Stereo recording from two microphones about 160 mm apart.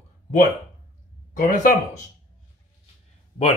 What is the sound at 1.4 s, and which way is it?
Speech, 50° left (ahead or behind).